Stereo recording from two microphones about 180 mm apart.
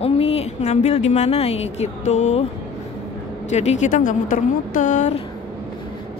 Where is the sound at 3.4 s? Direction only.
40° left (ahead or behind).